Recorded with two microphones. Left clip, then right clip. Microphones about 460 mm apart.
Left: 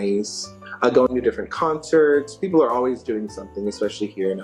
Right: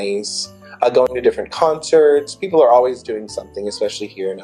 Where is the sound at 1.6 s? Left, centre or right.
Right.